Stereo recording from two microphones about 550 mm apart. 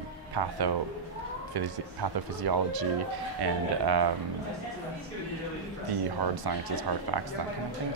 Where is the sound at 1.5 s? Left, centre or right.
Right.